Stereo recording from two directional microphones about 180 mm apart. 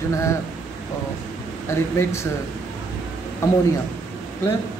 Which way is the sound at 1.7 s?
15° left (ahead or behind).